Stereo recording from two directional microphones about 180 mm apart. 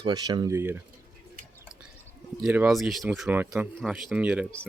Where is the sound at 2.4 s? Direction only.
5° right (ahead or behind).